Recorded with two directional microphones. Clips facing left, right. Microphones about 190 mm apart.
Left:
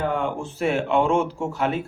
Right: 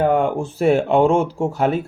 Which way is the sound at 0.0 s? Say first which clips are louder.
Right 7 dB; 50° right (ahead or behind).